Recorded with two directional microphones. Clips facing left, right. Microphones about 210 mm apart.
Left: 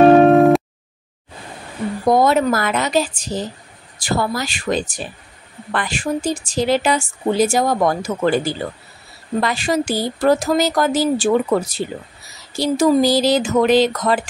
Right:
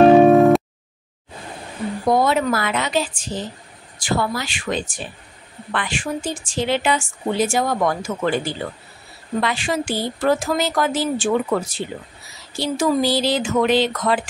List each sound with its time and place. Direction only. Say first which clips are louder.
0.0 s music: left 1 dB; centre (ahead or behind)
2.0 s a woman's voice: left 3 dB; 40° left (ahead or behind)